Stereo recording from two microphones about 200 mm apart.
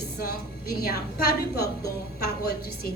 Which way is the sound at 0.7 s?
50° left (ahead or behind).